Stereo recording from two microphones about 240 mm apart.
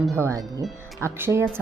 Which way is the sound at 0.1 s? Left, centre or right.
Centre.